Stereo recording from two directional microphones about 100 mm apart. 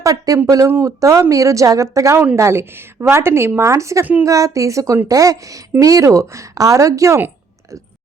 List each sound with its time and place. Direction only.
0.0 s a woman's voice: 35° right (ahead or behind)